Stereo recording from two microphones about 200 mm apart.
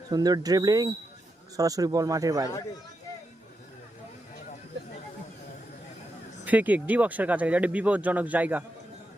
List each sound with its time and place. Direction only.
0.1 s speech: 20° right (ahead or behind)
6.4 s speech: 10° right (ahead or behind)